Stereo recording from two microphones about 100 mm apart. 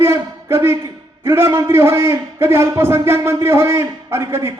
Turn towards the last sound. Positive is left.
turn(degrees=-25)  # may be behind; listen again after turning